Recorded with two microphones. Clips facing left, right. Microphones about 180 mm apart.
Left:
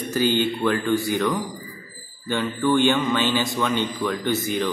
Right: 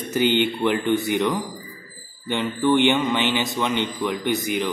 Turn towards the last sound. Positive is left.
turn(degrees=-15)  # may be behind; listen again after turning